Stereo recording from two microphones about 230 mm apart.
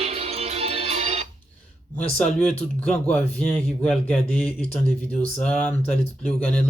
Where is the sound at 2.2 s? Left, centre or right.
Centre.